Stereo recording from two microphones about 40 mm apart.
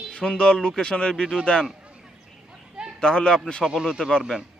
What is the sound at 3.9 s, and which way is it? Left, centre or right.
Speech, centre.